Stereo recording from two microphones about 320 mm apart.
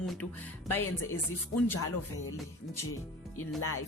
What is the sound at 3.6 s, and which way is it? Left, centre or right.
Music, left.